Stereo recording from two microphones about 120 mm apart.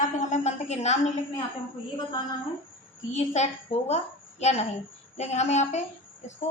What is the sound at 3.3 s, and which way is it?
A woman's voice, 65° left (ahead or behind).